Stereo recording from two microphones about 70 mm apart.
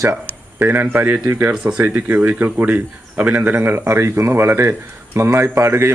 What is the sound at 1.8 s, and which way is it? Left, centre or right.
A man's voice, right.